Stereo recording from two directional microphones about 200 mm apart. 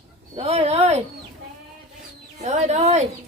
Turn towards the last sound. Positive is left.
turn(degrees=-35)  # may be behind; listen again after turning